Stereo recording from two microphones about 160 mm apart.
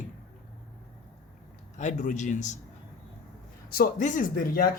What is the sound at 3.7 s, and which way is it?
Speech, 60° left (ahead or behind).